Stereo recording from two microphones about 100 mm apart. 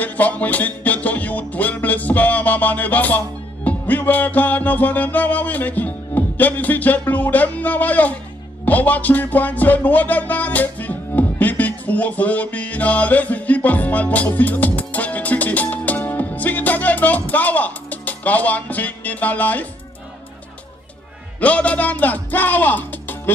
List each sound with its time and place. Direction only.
0.0 s music: 15° left (ahead or behind)
21.4 s speech: 15° left (ahead or behind)